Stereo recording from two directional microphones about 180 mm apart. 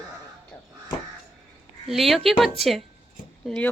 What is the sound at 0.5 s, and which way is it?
Crow, 10° left (ahead or behind).